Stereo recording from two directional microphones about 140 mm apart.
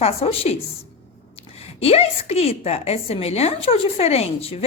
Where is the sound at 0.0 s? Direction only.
45° left (ahead or behind).